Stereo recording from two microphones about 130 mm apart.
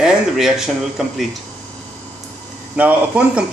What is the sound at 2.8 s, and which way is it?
Speech, 10° right (ahead or behind).